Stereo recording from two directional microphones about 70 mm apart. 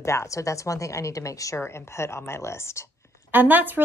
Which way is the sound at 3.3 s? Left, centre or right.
Right.